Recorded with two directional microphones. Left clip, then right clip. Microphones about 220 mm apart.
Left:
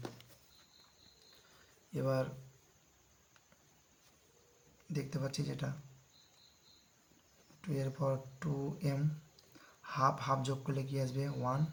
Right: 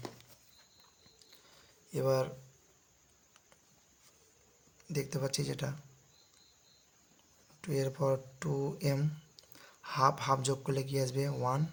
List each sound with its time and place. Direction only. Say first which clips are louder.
1.9 s speech: right 5 dB; 45° right (ahead or behind)
4.9 s speech: right 5 dB; 40° right (ahead or behind)
7.6 s speech: right 5 dB; 45° right (ahead or behind)